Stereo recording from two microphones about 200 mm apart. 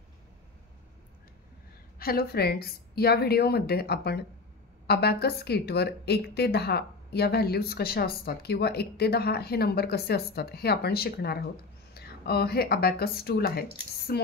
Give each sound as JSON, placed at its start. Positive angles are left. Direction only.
{"t": 2.0, "sound": "a woman's voice", "side_deg": 50}